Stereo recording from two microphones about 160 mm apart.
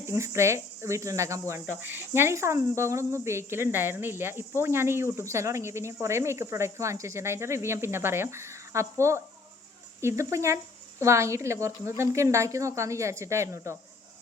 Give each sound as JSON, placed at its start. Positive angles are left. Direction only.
{"t": 0.0, "sound": "speech", "side_deg": -15}